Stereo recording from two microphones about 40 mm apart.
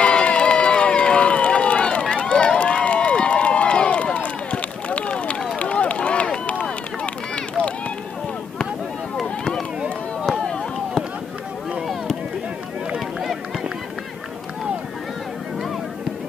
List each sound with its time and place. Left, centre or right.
0.0 s run: left
9.4 s run: centre